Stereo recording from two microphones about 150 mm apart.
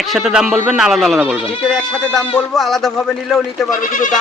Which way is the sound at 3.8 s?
60° left (ahead or behind).